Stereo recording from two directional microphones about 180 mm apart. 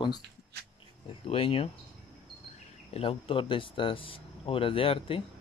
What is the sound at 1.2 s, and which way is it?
Speech, 30° left (ahead or behind).